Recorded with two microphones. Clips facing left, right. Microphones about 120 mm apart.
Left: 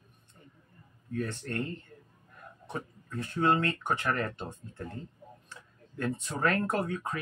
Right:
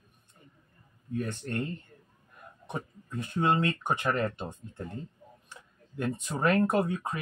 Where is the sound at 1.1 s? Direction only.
15° right (ahead or behind).